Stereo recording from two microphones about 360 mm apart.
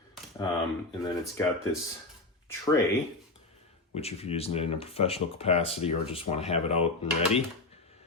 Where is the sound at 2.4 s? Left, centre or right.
Centre.